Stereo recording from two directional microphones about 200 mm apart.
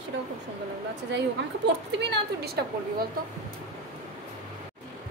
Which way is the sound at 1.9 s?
55° right (ahead or behind).